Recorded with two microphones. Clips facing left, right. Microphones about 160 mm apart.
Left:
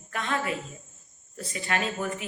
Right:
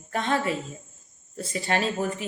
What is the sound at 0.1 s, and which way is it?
A woman's voice, 35° right (ahead or behind).